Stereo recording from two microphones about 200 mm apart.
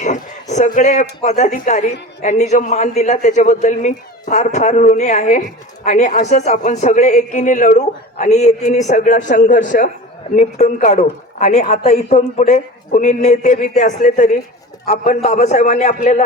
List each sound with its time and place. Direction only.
0.0 s a man's voice: 35° left (ahead or behind)